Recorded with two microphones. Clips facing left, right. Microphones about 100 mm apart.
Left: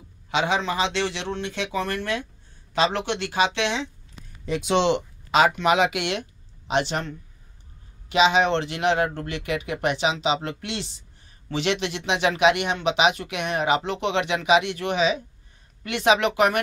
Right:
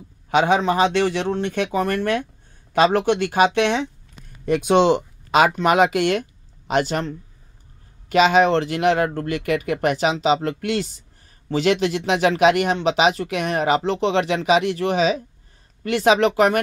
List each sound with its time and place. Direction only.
0.3 s speech: 50° right (ahead or behind)